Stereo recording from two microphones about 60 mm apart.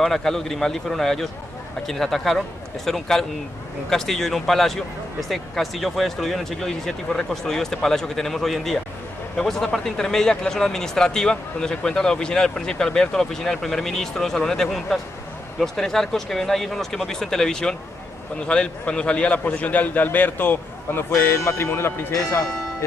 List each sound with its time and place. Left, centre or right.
0.0 s a man's voice: centre; by 21.0 s left
21.4 s speech: left
22.1 s speech: left